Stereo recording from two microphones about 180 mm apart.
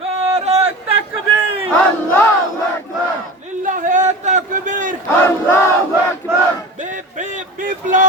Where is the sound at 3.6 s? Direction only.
45° right (ahead or behind).